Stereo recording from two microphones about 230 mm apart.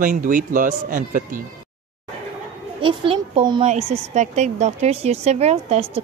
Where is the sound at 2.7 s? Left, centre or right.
Right.